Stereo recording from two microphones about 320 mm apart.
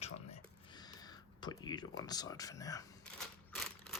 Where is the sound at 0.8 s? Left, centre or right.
Centre.